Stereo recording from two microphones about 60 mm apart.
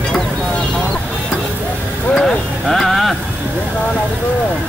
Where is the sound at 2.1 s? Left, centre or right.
Centre.